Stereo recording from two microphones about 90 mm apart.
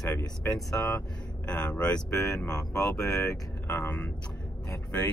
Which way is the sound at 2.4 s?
40° left (ahead or behind).